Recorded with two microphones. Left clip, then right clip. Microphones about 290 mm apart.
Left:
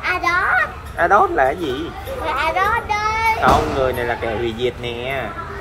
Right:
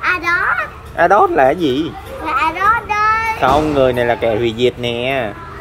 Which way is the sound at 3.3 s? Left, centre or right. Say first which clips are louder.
Right 3 dB; right.